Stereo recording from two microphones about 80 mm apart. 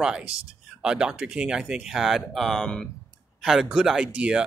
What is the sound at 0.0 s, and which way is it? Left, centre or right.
Speech, centre.